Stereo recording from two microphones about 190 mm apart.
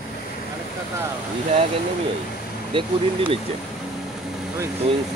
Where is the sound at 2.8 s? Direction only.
25° right (ahead or behind).